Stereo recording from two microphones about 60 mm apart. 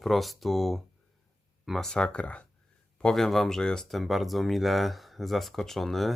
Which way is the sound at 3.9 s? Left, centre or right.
Centre.